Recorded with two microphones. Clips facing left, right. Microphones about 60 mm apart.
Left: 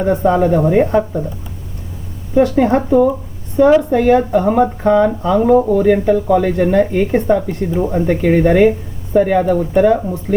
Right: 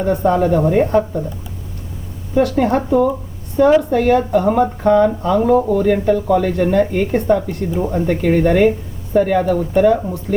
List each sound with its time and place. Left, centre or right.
0.1 s speech: centre
2.3 s speech: centre